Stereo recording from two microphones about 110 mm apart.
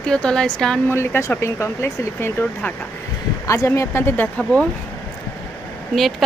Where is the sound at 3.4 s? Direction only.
25° left (ahead or behind).